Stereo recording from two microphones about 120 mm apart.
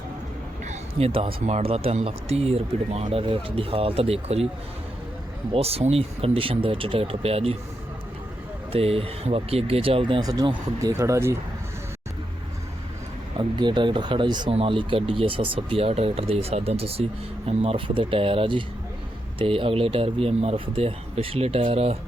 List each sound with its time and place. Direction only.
0.7 s speech: 55° right (ahead or behind)
5.5 s speech: 55° right (ahead or behind)
8.7 s speech: 55° right (ahead or behind); by 10.9 s 35° right (ahead or behind)
10.9 s speech: 25° right (ahead or behind)
13.6 s speech: 40° right (ahead or behind)